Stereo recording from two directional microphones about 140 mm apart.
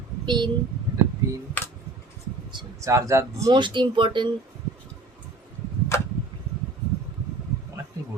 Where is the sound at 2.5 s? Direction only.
30° right (ahead or behind).